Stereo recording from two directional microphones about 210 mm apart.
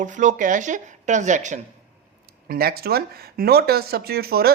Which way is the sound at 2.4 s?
45° right (ahead or behind).